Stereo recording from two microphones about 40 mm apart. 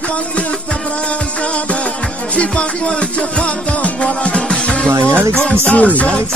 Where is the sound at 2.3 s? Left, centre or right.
Left.